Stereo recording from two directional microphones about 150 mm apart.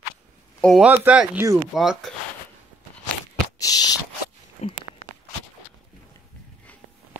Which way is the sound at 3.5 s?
25° left (ahead or behind).